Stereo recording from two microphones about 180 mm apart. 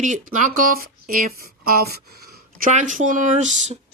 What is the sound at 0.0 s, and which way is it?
Speech, 45° right (ahead or behind).